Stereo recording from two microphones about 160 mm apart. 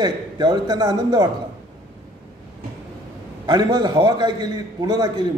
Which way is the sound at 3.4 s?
25° right (ahead or behind).